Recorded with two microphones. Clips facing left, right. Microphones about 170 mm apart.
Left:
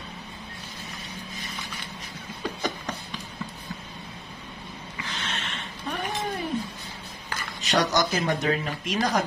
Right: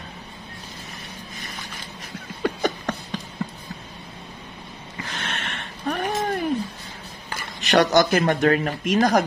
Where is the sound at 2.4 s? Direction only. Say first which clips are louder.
Right 7 dB; 60° right (ahead or behind).